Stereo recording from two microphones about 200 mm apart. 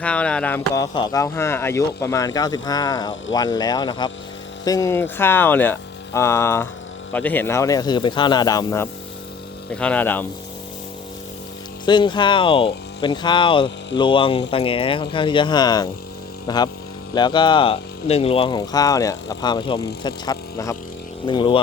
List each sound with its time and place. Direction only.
0.0 s speech: 5° left (ahead or behind)
9.7 s speech: 5° left (ahead or behind)
11.9 s speech: 25° left (ahead or behind)